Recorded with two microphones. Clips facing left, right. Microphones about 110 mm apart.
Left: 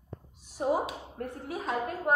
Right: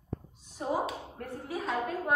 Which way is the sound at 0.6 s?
15° left (ahead or behind).